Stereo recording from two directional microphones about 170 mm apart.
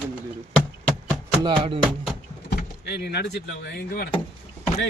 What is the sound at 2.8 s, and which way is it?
Speech, 70° left (ahead or behind).